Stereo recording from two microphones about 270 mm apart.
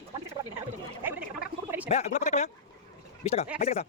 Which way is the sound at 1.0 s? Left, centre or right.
Centre.